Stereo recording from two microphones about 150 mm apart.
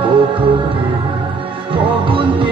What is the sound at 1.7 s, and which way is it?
Music, 35° right (ahead or behind).